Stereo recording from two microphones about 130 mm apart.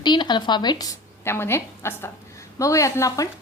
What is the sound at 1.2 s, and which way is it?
Speech, 20° left (ahead or behind).